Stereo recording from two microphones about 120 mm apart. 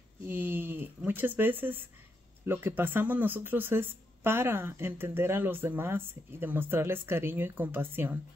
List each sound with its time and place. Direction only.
0.3 s speech: 15° right (ahead or behind)